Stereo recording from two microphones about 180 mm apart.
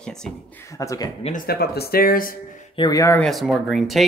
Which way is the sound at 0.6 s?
15° left (ahead or behind).